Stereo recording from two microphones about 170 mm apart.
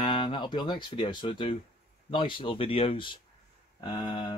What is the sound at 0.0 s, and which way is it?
Speech, 30° left (ahead or behind).